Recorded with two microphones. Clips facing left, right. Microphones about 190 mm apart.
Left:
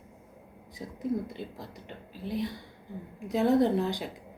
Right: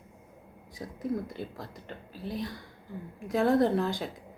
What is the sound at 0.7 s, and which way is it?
A woman's voice, 20° left (ahead or behind).